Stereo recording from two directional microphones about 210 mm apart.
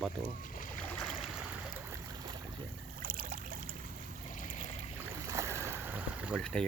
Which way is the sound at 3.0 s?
40° right (ahead or behind).